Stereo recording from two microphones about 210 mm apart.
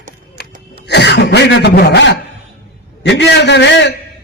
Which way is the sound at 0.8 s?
55° left (ahead or behind).